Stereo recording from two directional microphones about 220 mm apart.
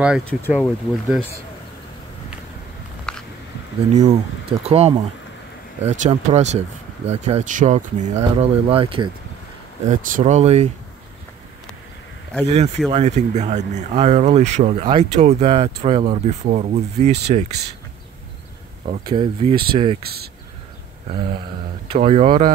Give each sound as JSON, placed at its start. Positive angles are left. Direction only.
{"t": 0.5, "sound": "speech", "side_deg": 0}
{"t": 3.1, "sound": "a sound", "side_deg": 5}
{"t": 3.9, "sound": "speech", "side_deg": -30}
{"t": 9.8, "sound": "speech", "side_deg": -35}
{"t": 12.4, "sound": "speech", "side_deg": -30}
{"t": 19.0, "sound": "speech", "side_deg": -20}
{"t": 21.1, "sound": "speech", "side_deg": -25}